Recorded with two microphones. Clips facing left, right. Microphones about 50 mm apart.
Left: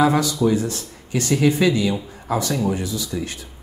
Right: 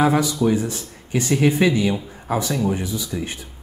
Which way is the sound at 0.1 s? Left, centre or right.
Right.